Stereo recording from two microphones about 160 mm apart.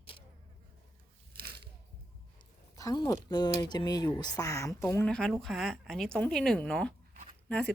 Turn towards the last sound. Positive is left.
turn(degrees=10)  # may be behind; listen again after turning